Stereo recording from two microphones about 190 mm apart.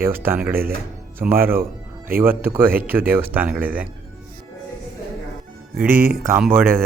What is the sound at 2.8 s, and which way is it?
A man's voice, 10° right (ahead or behind).